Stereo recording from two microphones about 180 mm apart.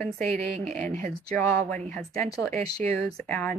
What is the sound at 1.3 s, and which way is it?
Speech, 5° left (ahead or behind).